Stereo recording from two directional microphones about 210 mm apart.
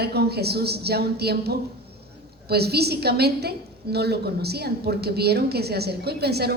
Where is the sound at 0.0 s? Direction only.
50° right (ahead or behind).